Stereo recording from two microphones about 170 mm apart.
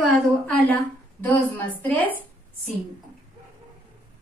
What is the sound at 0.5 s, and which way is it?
Speech, 10° left (ahead or behind).